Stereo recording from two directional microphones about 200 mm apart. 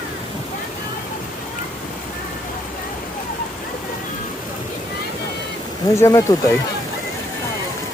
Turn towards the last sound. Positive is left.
turn(degrees=15)  # may be behind; listen again after turning